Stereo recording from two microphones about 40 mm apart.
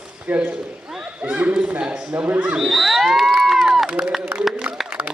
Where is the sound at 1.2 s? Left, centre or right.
Right.